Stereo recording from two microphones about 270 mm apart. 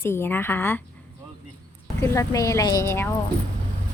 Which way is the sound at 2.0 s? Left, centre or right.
Centre.